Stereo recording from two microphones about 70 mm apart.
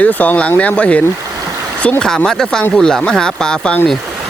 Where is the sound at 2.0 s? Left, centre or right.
Centre.